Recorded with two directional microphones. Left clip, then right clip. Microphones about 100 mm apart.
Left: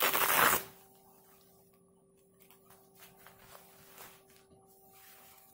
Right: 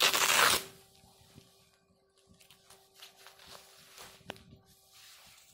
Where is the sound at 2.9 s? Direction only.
5° right (ahead or behind).